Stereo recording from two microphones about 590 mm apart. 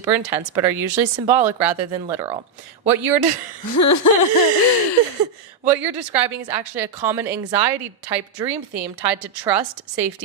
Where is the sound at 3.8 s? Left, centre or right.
Left.